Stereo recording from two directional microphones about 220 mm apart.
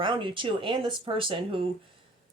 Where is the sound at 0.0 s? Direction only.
20° right (ahead or behind).